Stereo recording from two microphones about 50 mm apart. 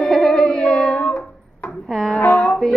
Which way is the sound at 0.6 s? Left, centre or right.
Centre.